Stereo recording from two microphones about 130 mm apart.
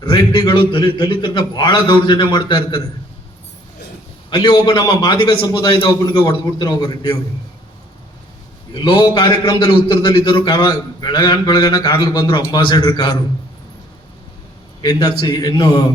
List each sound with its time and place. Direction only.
0.0 s a man's voice: 35° left (ahead or behind)
4.3 s a man's voice: 35° left (ahead or behind)
8.7 s a man's voice: 35° left (ahead or behind)
14.8 s a man's voice: 30° left (ahead or behind)